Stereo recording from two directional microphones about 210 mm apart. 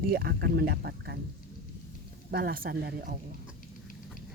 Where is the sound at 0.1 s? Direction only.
50° right (ahead or behind).